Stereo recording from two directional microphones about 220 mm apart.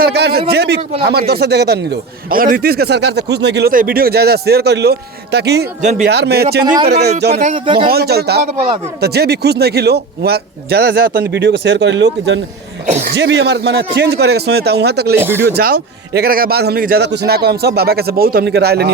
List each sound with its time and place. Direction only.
0.0 s a man's voice: 50° right (ahead or behind)
5.8 s speech: 35° right (ahead or behind)
6.1 s speech: 50° right (ahead or behind)
7.4 s speech: 25° right (ahead or behind)
7.9 s speech: 45° right (ahead or behind)
8.5 s speech: 25° right (ahead or behind)
9.0 s speech: 45° right (ahead or behind)
12.9 s speech: 30° right (ahead or behind)
13.1 s speech: 50° right (ahead or behind)
15.1 s speech: 10° right (ahead or behind)
15.5 s speech: 45° right (ahead or behind)